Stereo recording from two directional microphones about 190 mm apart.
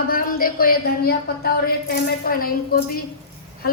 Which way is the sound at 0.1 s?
50° left (ahead or behind).